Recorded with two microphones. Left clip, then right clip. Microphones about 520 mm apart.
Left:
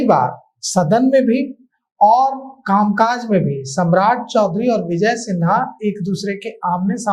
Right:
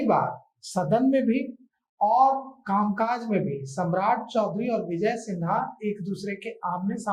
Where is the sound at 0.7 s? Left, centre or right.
Left.